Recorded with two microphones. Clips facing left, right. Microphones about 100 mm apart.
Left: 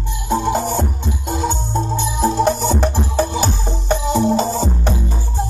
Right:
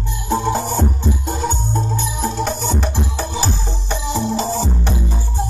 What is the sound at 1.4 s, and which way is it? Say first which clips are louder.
Music: left 1 dB; 25° left (ahead or behind).